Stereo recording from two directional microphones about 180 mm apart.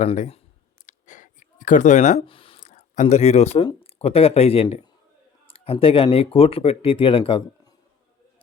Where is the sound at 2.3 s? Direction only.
30° left (ahead or behind).